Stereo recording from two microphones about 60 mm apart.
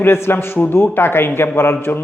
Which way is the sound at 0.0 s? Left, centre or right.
Left.